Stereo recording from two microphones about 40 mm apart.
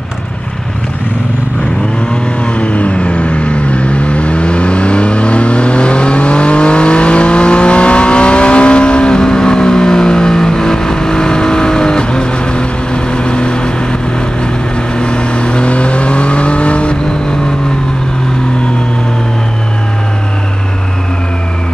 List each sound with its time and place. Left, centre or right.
2.4 s vehicle: left
15.0 s vehicle: left